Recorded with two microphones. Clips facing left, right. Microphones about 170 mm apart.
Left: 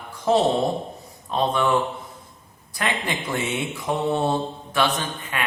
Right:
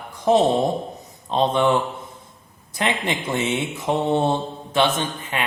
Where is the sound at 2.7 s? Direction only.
20° right (ahead or behind).